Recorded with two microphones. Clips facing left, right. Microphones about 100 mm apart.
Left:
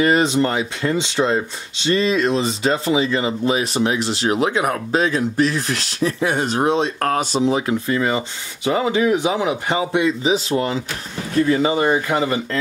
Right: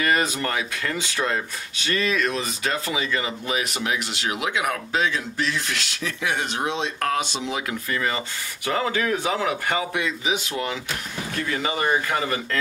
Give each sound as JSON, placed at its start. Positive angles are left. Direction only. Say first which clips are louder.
{"t": 0.0, "sound": "speech", "louder": "left 7 dB", "side_deg": 25}